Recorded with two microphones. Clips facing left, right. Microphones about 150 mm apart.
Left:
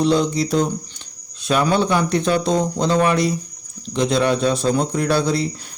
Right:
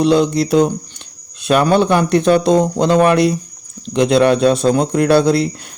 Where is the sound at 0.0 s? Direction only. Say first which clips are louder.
Right 4 dB; 65° right (ahead or behind).